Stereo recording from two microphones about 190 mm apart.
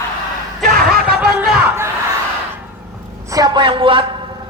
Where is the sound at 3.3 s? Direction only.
20° right (ahead or behind).